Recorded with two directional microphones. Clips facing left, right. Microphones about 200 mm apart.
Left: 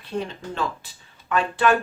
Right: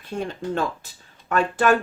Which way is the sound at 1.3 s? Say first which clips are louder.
Right 1 dB; 45° right (ahead or behind).